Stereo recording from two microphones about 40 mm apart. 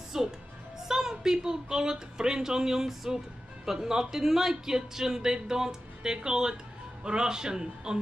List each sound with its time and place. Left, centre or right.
0.1 s music: centre
0.8 s a woman's voice: centre